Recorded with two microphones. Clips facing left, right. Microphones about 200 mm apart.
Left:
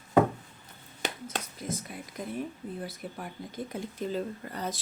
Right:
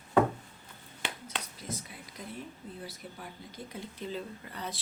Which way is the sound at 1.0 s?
45° left (ahead or behind).